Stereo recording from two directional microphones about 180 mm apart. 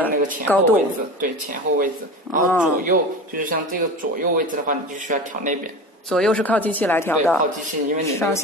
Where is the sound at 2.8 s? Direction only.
50° right (ahead or behind).